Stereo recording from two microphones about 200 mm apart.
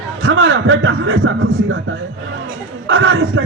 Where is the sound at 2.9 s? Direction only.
70° right (ahead or behind).